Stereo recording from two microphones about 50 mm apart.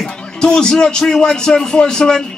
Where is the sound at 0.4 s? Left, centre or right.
Centre.